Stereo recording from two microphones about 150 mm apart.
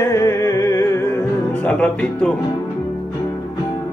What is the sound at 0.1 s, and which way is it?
Music, 20° left (ahead or behind).